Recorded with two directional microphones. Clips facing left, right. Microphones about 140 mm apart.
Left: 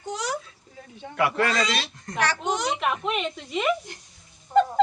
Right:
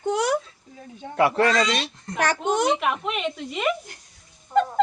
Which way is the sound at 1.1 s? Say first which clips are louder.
Right 4 dB; 30° right (ahead or behind).